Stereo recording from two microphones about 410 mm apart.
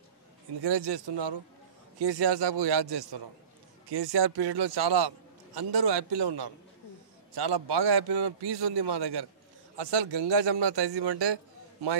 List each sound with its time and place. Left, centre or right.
0.6 s a man's voice: right
2.0 s a man's voice: right
3.9 s a man's voice: right
9.8 s a man's voice: right